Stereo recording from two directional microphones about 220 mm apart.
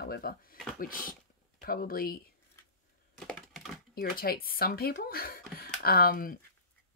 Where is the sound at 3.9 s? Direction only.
45° left (ahead or behind).